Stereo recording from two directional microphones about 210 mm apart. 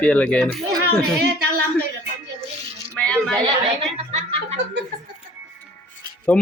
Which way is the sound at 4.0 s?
30° right (ahead or behind).